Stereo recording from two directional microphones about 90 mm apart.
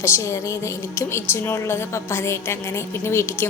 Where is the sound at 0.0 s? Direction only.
30° left (ahead or behind).